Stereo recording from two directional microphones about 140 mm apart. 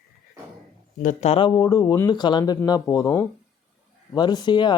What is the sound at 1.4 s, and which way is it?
Speech, 30° left (ahead or behind).